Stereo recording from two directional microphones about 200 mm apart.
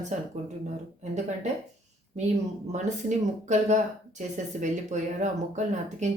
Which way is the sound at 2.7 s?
35° right (ahead or behind).